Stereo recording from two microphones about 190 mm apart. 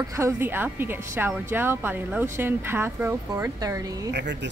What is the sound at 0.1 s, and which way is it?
A woman's voice, 15° right (ahead or behind).